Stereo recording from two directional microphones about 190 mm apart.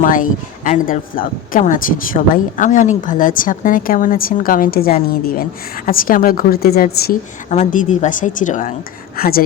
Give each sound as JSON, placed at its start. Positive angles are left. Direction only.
{"t": 0.0, "sound": "speech", "side_deg": 45}